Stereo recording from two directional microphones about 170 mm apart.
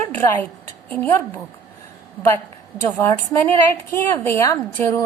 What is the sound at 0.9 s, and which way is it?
Speech, 10° left (ahead or behind).